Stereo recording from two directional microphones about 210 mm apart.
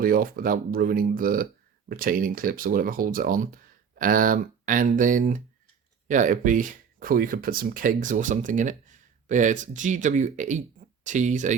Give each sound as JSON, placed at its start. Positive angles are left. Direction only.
{"t": 0.0, "sound": "speech", "side_deg": -45}